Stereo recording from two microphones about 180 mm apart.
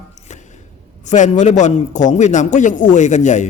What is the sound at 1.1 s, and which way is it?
A man's voice, 40° left (ahead or behind).